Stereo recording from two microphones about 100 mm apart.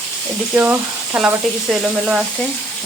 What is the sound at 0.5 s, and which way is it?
Speech, 20° right (ahead or behind).